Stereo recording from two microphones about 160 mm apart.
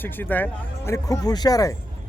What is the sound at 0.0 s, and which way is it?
A man's voice, 10° left (ahead or behind).